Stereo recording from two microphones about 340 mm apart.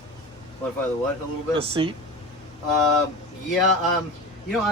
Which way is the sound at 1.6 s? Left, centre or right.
Centre.